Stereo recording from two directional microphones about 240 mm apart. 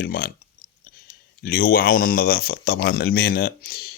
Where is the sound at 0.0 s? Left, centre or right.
Left.